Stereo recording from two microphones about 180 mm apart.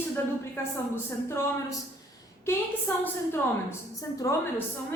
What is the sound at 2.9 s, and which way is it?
Speech, 10° left (ahead or behind).